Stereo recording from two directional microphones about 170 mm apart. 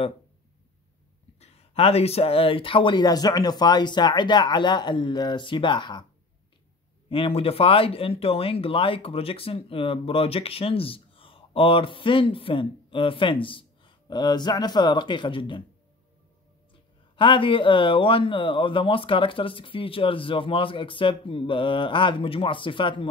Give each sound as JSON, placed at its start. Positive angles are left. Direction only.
{"t": 1.4, "sound": "speech", "side_deg": 35}
{"t": 7.1, "sound": "speech", "side_deg": 35}
{"t": 17.2, "sound": "speech", "side_deg": 30}